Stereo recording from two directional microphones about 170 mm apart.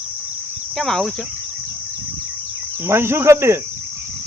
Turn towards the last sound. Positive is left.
turn(degrees=-15)  # may be behind; listen again after turning